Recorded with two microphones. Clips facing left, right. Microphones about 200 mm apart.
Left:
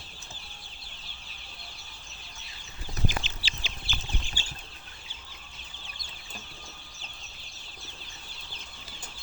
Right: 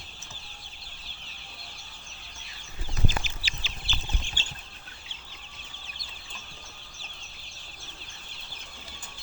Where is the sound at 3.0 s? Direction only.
25° left (ahead or behind).